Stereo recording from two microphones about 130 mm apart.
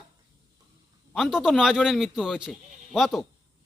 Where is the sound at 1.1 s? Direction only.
Centre (ahead or behind).